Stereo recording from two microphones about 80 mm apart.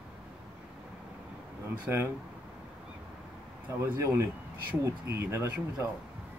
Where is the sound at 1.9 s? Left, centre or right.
Right.